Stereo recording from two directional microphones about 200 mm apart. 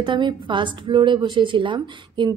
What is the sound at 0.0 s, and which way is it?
A woman's voice, 25° right (ahead or behind).